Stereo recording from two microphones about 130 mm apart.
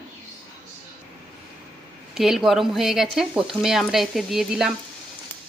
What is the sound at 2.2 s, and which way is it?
Speech, centre (ahead or behind).